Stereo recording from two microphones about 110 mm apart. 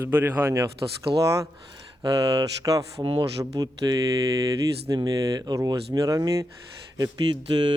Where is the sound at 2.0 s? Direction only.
35° right (ahead or behind).